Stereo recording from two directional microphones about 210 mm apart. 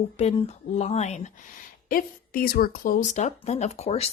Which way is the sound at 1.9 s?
45° left (ahead or behind).